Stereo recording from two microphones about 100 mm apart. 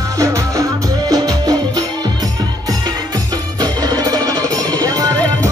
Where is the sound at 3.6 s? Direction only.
40° right (ahead or behind).